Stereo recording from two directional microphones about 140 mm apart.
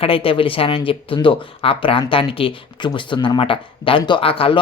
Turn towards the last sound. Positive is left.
turn(degrees=40)  # may be behind; listen again after turning